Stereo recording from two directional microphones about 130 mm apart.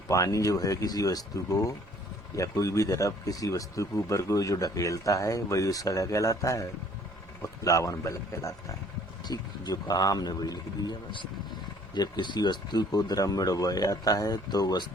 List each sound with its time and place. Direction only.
0.1 s speech: 25° left (ahead or behind)